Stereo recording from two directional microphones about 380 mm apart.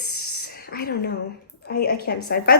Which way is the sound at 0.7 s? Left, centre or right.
Left.